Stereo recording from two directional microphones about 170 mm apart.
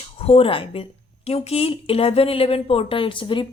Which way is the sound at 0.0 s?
35° left (ahead or behind).